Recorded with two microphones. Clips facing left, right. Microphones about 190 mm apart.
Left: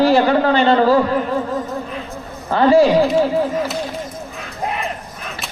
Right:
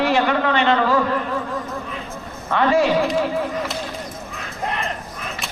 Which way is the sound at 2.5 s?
35° left (ahead or behind).